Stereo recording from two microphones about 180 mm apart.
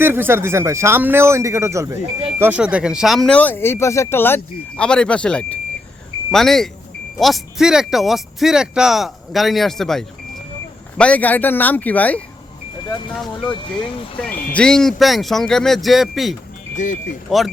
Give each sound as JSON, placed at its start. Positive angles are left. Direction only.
{"t": 0.0, "sound": "speech", "side_deg": -10}
{"t": 14.5, "sound": "speech", "side_deg": 5}
{"t": 16.7, "sound": "speech", "side_deg": 45}
{"t": 17.2, "sound": "speech", "side_deg": 0}